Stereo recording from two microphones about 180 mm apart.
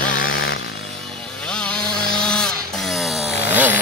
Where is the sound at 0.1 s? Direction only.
50° left (ahead or behind).